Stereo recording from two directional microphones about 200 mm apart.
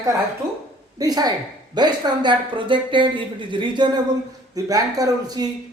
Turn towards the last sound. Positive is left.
turn(degrees=-20)  # may be behind; listen again after turning